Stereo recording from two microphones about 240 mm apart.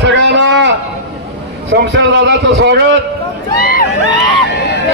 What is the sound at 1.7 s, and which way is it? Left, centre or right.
A man's voice, right.